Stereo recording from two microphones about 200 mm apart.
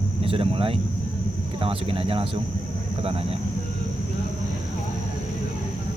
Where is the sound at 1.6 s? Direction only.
25° right (ahead or behind).